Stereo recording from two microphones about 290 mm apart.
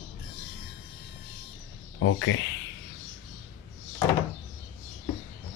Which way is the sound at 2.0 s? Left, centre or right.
Left.